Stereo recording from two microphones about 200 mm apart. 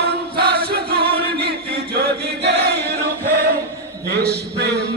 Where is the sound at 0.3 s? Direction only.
55° right (ahead or behind).